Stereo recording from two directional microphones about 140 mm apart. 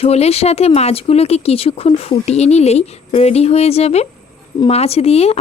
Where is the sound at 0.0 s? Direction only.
50° left (ahead or behind).